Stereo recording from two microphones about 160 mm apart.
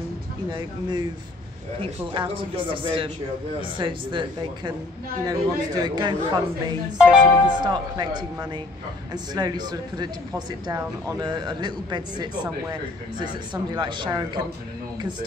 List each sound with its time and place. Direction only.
0.5 s speech: 30° right (ahead or behind)
7.0 s speech: 5° right (ahead or behind)
7.6 s speech: 25° right (ahead or behind)